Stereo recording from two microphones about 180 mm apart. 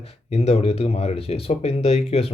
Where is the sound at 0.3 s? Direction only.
35° left (ahead or behind).